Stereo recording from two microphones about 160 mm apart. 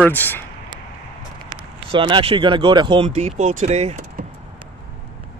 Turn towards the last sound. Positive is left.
turn(degrees=-45)  # may be behind; listen again after turning